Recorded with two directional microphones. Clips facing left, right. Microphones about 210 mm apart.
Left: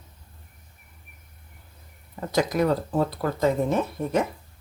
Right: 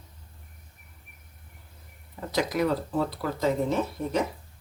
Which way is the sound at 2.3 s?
45° left (ahead or behind).